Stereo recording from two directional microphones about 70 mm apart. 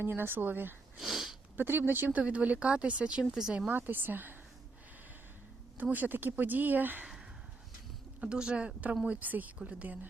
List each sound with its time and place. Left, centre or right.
0.0 s speech: right
0.9 s sniff: centre
1.5 s speech: right; by 3.6 s centre
3.7 s speech: right
5.7 s speech: right
8.2 s speech: centre